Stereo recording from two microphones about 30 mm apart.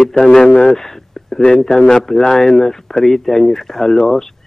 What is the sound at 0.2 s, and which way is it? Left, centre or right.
Speech, centre.